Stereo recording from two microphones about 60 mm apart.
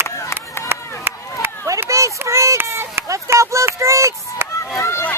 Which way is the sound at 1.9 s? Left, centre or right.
Right.